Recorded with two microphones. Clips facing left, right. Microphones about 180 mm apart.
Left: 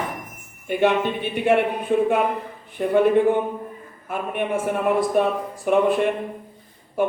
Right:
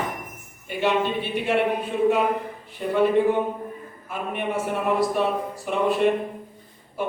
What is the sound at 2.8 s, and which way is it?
Speech, 60° left (ahead or behind).